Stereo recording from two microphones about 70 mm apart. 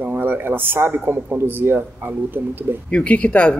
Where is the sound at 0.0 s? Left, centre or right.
Right.